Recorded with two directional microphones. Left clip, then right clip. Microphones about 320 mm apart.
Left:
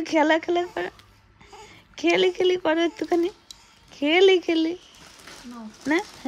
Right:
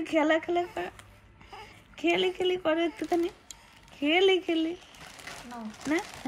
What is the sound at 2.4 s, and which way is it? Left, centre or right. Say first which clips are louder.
Speech: left 6 dB; left.